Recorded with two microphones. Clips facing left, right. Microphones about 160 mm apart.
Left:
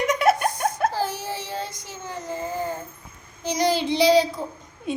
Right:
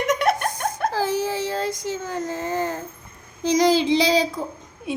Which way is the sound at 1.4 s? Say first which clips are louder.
Right 7 dB; 90° right.